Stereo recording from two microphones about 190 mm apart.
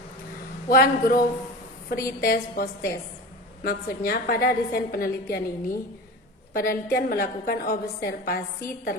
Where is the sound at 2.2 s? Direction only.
55° left (ahead or behind).